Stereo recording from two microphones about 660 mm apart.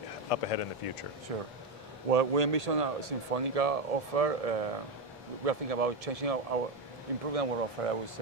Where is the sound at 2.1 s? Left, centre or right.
Right.